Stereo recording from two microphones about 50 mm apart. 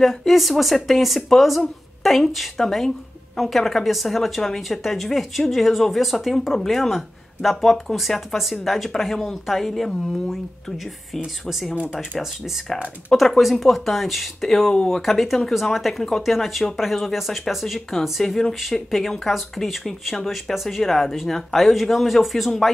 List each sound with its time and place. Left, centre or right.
0.0 s speech: centre
11.8 s speech: centre
13.1 s speech: centre
14.7 s speech: centre
15.0 s speech: centre